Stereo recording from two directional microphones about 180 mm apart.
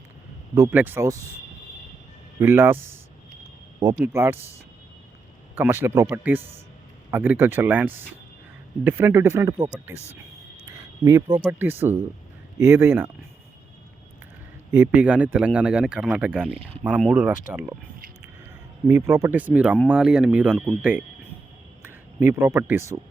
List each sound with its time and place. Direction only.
0.5 s speech: 15° right (ahead or behind)
2.4 s speech: 10° right (ahead or behind)
5.8 s speech: 15° right (ahead or behind)
11.0 s speech: 15° right (ahead or behind)
14.7 s speech: 10° right (ahead or behind)
18.9 s a man's voice: 15° right (ahead or behind)